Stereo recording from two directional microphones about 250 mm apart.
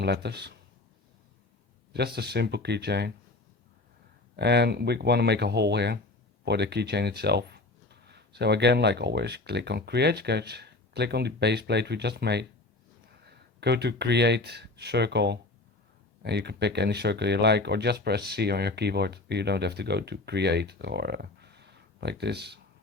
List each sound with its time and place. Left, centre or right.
0.0 s speech: right
1.9 s speech: right
4.4 s speech: right